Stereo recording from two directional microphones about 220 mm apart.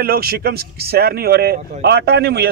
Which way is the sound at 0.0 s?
45° right (ahead or behind).